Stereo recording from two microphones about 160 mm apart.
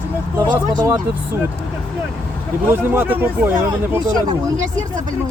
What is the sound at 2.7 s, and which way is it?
Speech, 10° right (ahead or behind).